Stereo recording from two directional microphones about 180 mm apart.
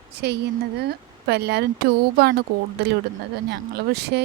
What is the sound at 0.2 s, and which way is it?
A woman's voice, 65° right (ahead or behind).